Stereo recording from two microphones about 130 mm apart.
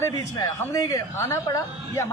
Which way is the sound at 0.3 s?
30° left (ahead or behind).